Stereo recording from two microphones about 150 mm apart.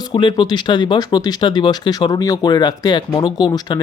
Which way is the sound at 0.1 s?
30° left (ahead or behind).